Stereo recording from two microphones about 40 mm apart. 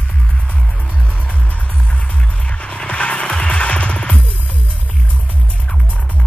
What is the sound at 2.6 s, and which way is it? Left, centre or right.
Music, left.